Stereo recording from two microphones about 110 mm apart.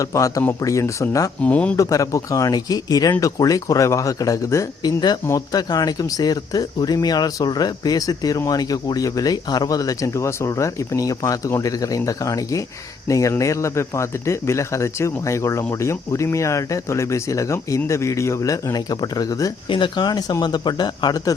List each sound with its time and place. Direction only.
0.0 s speech: 30° left (ahead or behind)
1.4 s speech: 10° left (ahead or behind)
1.7 s speech: 30° left (ahead or behind)